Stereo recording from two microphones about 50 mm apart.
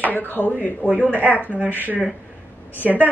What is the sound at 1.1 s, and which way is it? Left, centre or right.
Speech, right.